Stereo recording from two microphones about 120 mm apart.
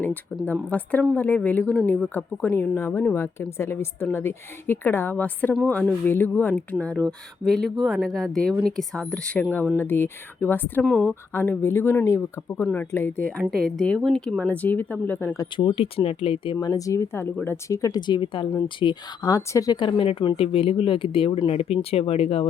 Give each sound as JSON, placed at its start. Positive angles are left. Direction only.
{"t": 0.0, "sound": "a woman's voice", "side_deg": 15}
{"t": 15.5, "sound": "speech", "side_deg": 45}
{"t": 16.6, "sound": "a woman's voice", "side_deg": 30}
{"t": 19.3, "sound": "speech", "side_deg": 30}
{"t": 21.4, "sound": "speech", "side_deg": 60}